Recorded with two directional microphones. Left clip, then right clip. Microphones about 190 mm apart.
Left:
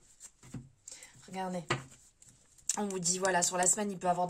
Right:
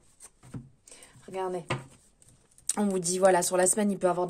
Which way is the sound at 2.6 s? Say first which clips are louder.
Right 5 dB; 45° right (ahead or behind).